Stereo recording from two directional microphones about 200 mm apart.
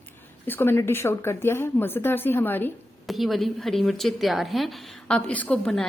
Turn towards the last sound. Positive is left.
turn(degrees=5)  # may be behind; listen again after turning